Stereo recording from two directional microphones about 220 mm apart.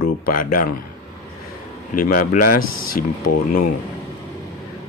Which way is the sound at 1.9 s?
40° left (ahead or behind).